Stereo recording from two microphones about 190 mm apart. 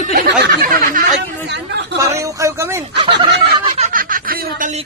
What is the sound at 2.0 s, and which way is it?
Speech, 15° right (ahead or behind).